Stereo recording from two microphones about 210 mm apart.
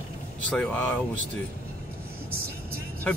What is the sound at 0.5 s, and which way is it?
Speech, 5° left (ahead or behind).